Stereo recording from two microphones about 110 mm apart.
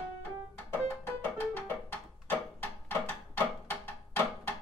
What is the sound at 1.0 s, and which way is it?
Music, 15° left (ahead or behind).